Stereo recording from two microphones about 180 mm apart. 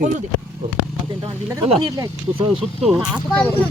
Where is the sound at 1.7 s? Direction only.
25° right (ahead or behind).